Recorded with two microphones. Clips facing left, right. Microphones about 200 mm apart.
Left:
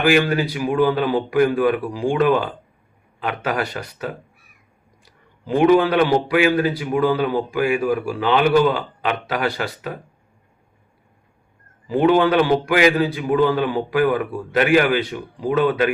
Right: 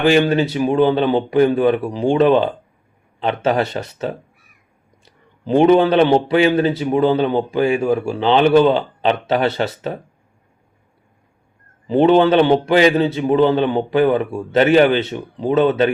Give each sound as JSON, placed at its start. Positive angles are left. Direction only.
{"t": 0.0, "sound": "a man's voice", "side_deg": -25}
{"t": 11.9, "sound": "a man's voice", "side_deg": -25}